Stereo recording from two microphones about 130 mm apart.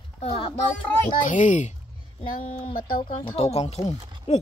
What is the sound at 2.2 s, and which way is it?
Speech, 45° left (ahead or behind).